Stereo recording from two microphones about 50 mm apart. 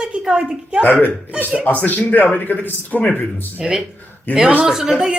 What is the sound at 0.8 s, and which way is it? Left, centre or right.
A man's voice, left.